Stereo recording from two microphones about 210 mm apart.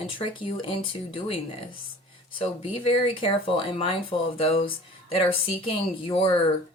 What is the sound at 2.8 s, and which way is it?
Speech, 25° left (ahead or behind).